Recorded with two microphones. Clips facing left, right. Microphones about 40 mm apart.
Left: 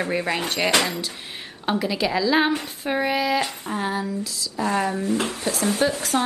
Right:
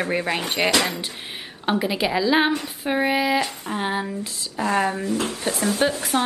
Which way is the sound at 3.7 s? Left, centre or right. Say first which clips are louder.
Even; right.